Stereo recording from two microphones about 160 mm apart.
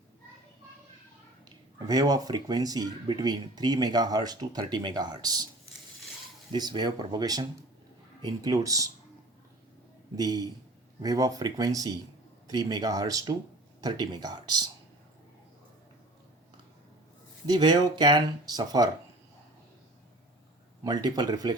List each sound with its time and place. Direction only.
1.5 s speech: 25° right (ahead or behind)
6.5 s speech: 25° right (ahead or behind)
10.2 s speech: 25° right (ahead or behind)
17.4 s speech: 25° right (ahead or behind)
20.8 s speech: 25° right (ahead or behind)